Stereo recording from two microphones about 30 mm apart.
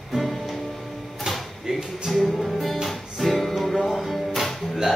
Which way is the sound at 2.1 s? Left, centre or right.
Centre.